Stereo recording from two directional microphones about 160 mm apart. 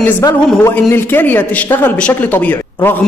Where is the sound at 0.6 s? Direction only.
15° left (ahead or behind).